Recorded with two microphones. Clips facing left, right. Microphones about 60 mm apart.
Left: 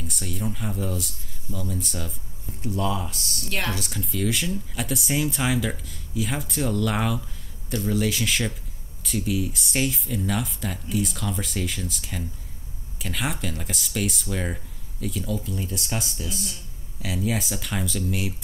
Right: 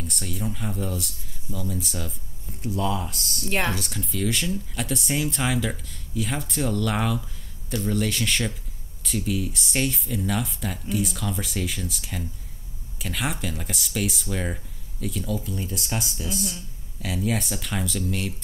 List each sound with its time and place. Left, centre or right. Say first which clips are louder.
0.0 s speech: even; centre
3.4 s speech: right 3 dB; right
3.7 s speech: even; centre